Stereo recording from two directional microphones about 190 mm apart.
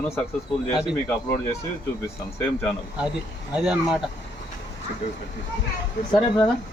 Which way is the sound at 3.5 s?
5° right (ahead or behind).